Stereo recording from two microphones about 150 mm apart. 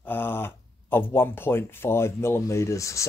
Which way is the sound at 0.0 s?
15° left (ahead or behind).